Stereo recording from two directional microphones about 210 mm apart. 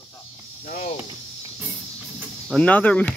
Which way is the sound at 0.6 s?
45° left (ahead or behind).